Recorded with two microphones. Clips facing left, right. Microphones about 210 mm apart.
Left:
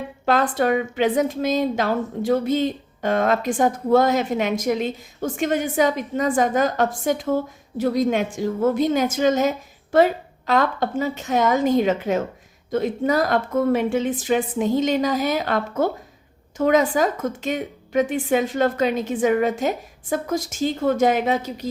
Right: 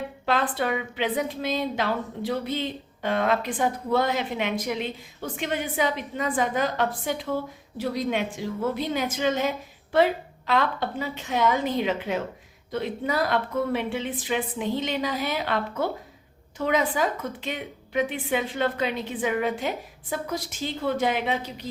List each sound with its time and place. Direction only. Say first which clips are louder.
0.3 s a woman's voice: left 6 dB; 45° left (ahead or behind)